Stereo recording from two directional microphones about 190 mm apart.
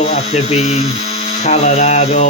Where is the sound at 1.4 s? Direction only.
35° left (ahead or behind).